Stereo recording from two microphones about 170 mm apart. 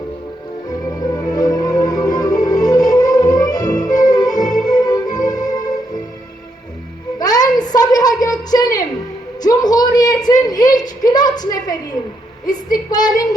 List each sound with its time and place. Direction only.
0.7 s music: 20° left (ahead or behind)
7.2 s a sound: 20° left (ahead or behind)
12.5 s child singing: 25° left (ahead or behind)